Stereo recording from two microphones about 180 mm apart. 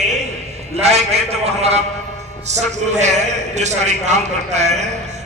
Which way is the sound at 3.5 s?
40° right (ahead or behind).